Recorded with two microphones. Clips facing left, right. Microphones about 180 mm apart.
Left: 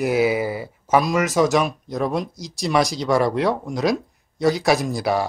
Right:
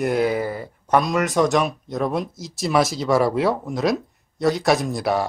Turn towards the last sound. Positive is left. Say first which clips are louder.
# even
turn(degrees=0)  # may be behind; listen again after turning